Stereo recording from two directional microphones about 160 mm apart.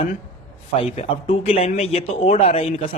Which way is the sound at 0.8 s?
35° left (ahead or behind).